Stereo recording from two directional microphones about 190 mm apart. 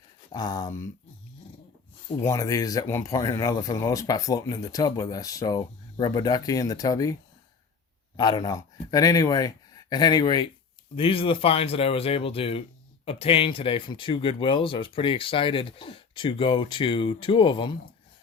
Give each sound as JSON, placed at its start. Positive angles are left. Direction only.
{"t": 0.3, "sound": "speech", "side_deg": 20}
{"t": 2.2, "sound": "speech", "side_deg": 15}